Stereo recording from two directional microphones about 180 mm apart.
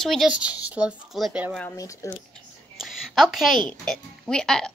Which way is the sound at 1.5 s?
5° left (ahead or behind).